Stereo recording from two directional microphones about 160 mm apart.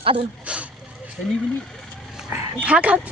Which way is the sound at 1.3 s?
Centre (ahead or behind).